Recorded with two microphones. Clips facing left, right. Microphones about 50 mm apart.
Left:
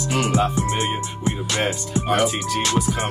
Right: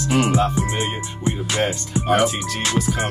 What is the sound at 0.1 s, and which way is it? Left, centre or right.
Music, centre.